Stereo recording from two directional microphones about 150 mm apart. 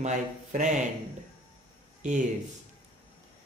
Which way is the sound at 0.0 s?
55° right (ahead or behind).